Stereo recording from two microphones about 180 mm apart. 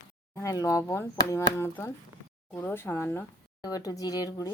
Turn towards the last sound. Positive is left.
turn(degrees=20)  # may be behind; listen again after turning